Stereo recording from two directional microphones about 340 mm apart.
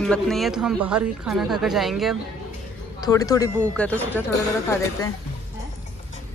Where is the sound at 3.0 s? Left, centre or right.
Centre.